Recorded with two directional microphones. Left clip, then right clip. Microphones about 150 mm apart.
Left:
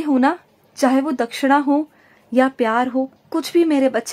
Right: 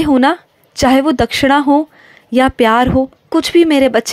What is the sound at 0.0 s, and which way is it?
A woman's voice, 30° right (ahead or behind).